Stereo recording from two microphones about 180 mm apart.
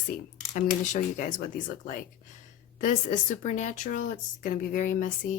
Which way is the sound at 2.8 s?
40° left (ahead or behind).